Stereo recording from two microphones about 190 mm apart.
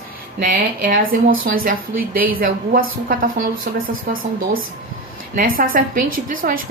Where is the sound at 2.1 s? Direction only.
50° right (ahead or behind).